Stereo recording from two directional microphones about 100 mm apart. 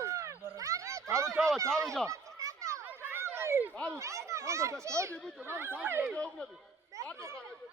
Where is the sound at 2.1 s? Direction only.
30° right (ahead or behind).